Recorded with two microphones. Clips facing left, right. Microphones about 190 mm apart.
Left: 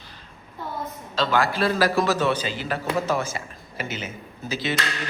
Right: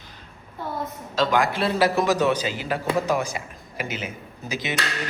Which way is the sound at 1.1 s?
10° right (ahead or behind).